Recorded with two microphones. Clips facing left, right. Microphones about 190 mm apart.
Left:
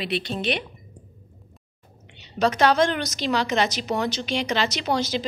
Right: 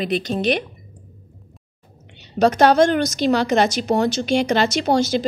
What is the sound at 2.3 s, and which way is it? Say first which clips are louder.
A woman's voice: right 5 dB; 50° right (ahead or behind).